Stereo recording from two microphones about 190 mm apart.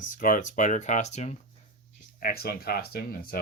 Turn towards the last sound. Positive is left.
turn(degrees=50)  # may be behind; listen again after turning